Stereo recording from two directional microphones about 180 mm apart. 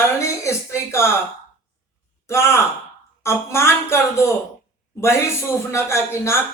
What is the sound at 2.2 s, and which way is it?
Speech, 15° left (ahead or behind).